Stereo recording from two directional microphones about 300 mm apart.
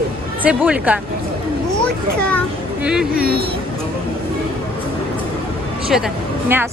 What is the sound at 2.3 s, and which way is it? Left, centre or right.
Speech, centre.